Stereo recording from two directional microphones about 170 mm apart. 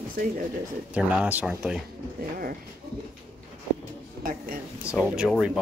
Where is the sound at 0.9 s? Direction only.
5° right (ahead or behind).